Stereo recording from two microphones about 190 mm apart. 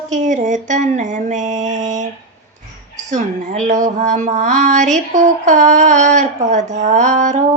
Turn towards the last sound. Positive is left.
turn(degrees=-40)  # may be behind; listen again after turning